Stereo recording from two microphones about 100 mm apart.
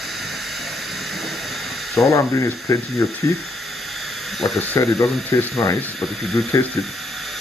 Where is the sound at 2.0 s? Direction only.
30° left (ahead or behind).